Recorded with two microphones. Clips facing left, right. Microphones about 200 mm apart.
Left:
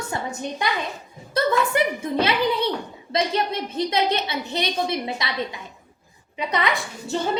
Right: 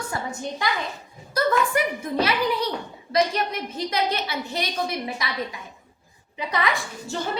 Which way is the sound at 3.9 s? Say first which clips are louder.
Left 1 dB; 20° left (ahead or behind).